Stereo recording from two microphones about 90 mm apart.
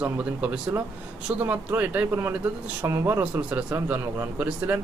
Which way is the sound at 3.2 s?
15° right (ahead or behind).